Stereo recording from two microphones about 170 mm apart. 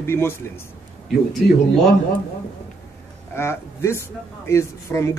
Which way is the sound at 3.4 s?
15° left (ahead or behind).